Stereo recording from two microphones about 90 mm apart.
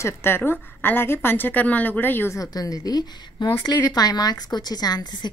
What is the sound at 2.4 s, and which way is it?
A woman's voice, 45° left (ahead or behind).